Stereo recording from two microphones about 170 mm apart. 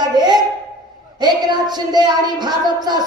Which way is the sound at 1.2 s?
25° right (ahead or behind).